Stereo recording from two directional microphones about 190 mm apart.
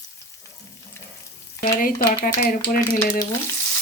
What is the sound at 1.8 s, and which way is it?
Speech, 50° left (ahead or behind).